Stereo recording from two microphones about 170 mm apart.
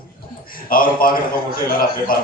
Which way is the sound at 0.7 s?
55° left (ahead or behind).